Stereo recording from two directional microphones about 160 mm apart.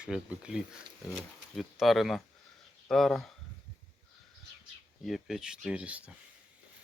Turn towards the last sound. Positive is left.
turn(degrees=-10)  # may be behind; listen again after turning